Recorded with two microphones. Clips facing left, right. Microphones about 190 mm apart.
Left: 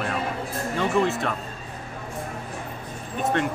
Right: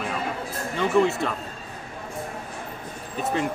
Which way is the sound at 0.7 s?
Centre (ahead or behind).